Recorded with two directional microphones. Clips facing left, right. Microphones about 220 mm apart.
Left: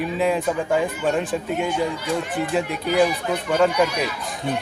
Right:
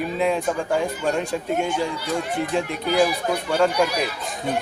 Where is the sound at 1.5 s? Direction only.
50° right (ahead or behind).